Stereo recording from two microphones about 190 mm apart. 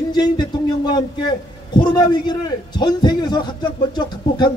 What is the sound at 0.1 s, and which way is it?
A man's voice, 20° left (ahead or behind).